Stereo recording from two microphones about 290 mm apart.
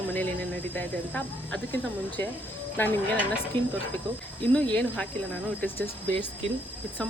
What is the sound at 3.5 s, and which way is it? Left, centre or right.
Speech, centre.